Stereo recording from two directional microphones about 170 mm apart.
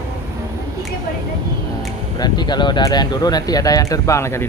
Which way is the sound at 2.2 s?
25° left (ahead or behind).